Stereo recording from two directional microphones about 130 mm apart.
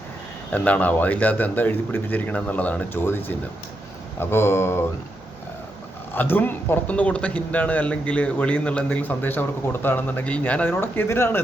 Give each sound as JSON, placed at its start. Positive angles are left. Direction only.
{"t": 0.5, "sound": "speech", "side_deg": 10}
{"t": 4.2, "sound": "a sound", "side_deg": 20}
{"t": 6.1, "sound": "speech", "side_deg": 15}